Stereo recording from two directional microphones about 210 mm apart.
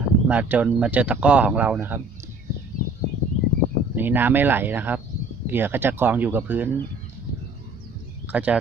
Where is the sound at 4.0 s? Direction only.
10° right (ahead or behind).